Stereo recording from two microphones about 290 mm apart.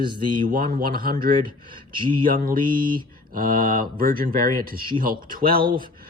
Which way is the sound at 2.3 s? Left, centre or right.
Right.